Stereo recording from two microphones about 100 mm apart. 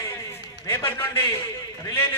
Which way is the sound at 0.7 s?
30° left (ahead or behind).